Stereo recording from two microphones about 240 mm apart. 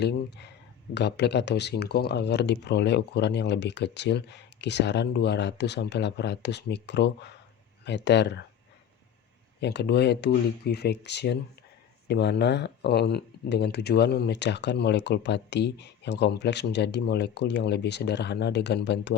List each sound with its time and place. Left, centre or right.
0.0 s speech: left
9.6 s speech: left